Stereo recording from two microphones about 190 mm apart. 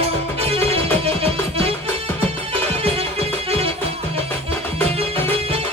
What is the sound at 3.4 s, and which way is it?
Music, 30° right (ahead or behind).